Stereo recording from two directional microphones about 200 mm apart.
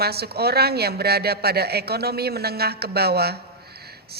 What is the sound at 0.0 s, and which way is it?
A man's voice, 50° right (ahead or behind).